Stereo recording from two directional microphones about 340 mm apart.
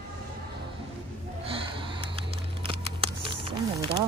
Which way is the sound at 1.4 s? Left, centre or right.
Centre.